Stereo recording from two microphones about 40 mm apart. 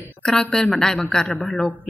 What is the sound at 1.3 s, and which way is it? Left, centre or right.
Speech, left.